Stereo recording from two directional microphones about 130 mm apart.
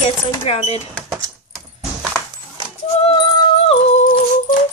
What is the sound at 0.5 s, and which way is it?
Speech, 55° left (ahead or behind).